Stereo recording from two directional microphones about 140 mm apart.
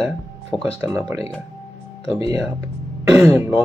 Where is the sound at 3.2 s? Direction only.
20° right (ahead or behind).